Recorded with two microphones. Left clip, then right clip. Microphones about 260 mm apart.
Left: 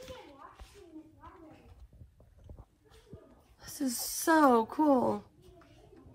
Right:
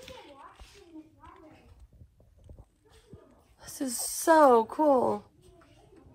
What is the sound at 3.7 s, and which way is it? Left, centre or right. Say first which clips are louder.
A woman's voice: right 1 dB; centre.